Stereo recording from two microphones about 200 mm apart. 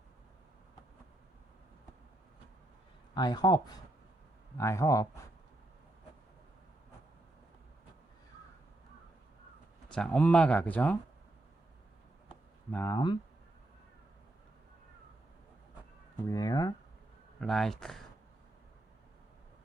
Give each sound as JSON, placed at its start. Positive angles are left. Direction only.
{"t": 3.2, "sound": "speech", "side_deg": 20}
{"t": 9.9, "sound": "speech", "side_deg": 5}
{"t": 12.7, "sound": "speech", "side_deg": 10}
{"t": 16.2, "sound": "speech", "side_deg": 15}
{"t": 17.4, "sound": "speech", "side_deg": 0}